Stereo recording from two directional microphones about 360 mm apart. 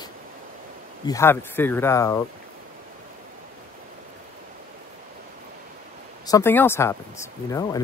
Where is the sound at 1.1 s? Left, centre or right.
Centre.